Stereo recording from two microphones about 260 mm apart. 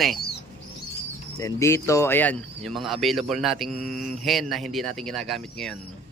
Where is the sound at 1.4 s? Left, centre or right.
Centre.